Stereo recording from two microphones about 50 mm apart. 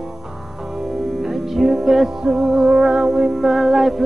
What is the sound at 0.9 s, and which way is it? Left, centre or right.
Music, centre.